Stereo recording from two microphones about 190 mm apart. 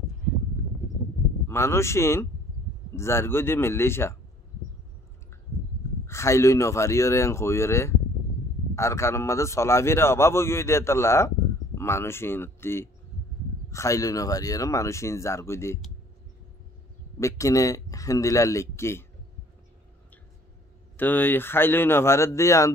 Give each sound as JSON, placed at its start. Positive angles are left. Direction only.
{"t": 1.5, "sound": "a man's voice", "side_deg": 15}
{"t": 6.0, "sound": "a man's voice", "side_deg": 15}
{"t": 17.2, "sound": "a man's voice", "side_deg": 15}
{"t": 21.0, "sound": "a man's voice", "side_deg": 10}